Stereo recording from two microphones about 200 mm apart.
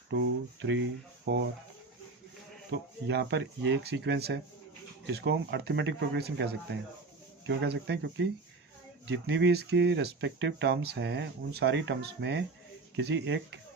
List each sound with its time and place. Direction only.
0.1 s speech: 65° right (ahead or behind)
2.7 s speech: 60° right (ahead or behind)